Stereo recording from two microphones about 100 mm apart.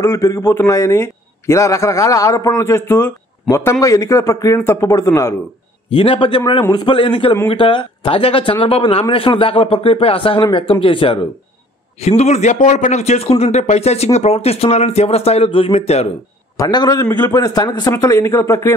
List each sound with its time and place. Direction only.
0.0 s a man's voice: 30° left (ahead or behind)
5.9 s speech: 55° left (ahead or behind)
6.7 s a man's voice: 45° left (ahead or behind)
7.0 s speech: 60° left (ahead or behind)
12.0 s a man's voice: 90° left
16.5 s a man's voice: 40° left (ahead or behind)